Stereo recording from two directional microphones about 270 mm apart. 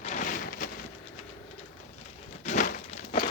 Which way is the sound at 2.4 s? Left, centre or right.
Left.